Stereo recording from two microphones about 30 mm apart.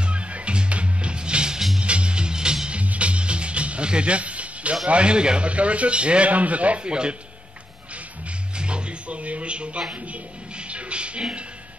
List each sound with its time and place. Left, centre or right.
0.0 s music: right
2.7 s music: right
4.8 s a man's voice: right
5.4 s speech: right
6.3 s speech: right
6.8 s a man's voice: right
8.5 s speech: right
9.9 s speech: right
10.5 s music: right